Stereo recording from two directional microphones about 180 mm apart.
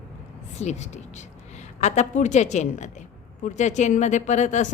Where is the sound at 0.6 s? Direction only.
40° left (ahead or behind).